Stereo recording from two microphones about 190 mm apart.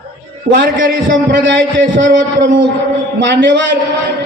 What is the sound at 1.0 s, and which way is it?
A man's voice, 70° right (ahead or behind).